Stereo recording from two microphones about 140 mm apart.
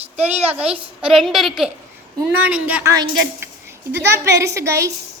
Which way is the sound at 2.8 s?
25° right (ahead or behind).